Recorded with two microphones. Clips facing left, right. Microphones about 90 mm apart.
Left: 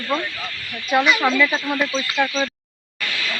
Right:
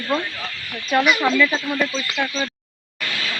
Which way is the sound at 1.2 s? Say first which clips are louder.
Even; 10° left (ahead or behind).